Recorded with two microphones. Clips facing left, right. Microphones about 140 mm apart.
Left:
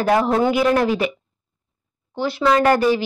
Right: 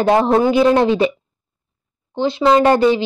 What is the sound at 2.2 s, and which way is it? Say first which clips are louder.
Speech: right 4 dB; 20° right (ahead or behind).